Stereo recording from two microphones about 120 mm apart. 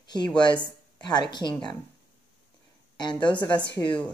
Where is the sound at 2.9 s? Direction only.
40° left (ahead or behind).